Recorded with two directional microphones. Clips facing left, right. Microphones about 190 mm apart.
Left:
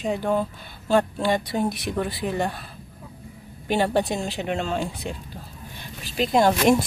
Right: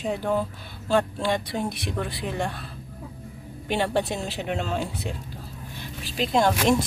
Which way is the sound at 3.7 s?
Centre (ahead or behind).